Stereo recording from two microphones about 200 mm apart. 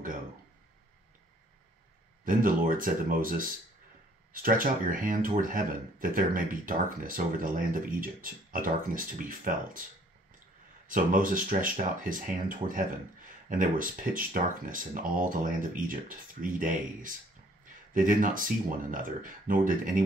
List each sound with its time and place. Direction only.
2.2 s speech: 45° right (ahead or behind)
10.9 s speech: 40° right (ahead or behind)